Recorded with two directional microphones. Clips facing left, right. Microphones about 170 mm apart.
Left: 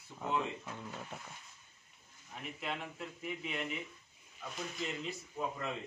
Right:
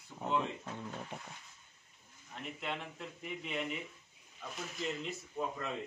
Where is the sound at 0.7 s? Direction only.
10° right (ahead or behind).